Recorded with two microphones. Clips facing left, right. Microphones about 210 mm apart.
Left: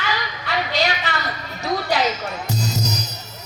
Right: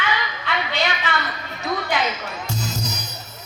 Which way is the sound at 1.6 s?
40° left (ahead or behind).